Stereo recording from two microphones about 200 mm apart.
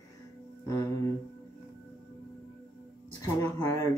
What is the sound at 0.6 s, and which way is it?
Music, 15° left (ahead or behind).